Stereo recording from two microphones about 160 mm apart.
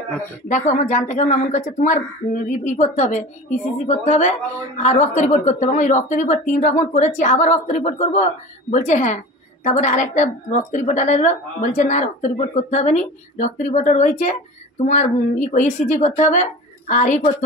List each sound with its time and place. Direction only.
0.5 s a woman's voice: 50° left (ahead or behind)